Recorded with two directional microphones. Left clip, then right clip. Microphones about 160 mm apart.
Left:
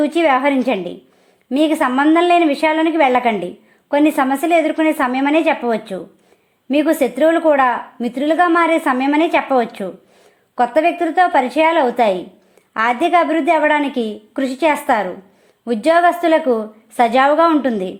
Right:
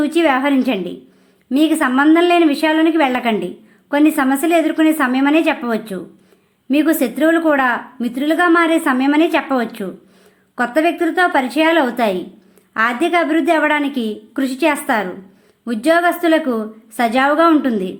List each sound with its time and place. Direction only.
0.0 s a woman's voice: 30° left (ahead or behind)